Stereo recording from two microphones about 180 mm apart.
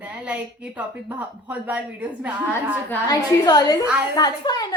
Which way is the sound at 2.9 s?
20° left (ahead or behind).